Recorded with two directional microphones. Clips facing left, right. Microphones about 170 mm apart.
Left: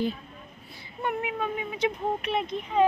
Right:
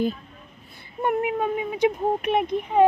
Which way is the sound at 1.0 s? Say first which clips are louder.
Right 6 dB; 45° right (ahead or behind).